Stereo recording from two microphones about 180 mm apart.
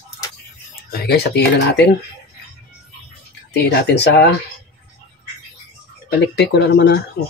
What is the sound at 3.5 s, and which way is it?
Speech, 65° left (ahead or behind).